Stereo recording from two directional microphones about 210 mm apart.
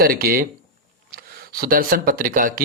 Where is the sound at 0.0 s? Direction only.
45° right (ahead or behind).